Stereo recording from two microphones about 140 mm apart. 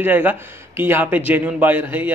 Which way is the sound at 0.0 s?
15° right (ahead or behind).